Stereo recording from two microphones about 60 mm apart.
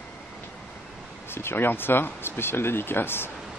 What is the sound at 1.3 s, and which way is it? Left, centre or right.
Speech, left.